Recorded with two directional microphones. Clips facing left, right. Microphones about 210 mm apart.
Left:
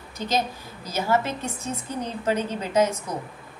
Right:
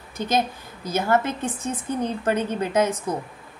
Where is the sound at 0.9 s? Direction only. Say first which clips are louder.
Right 2 dB; 55° right (ahead or behind).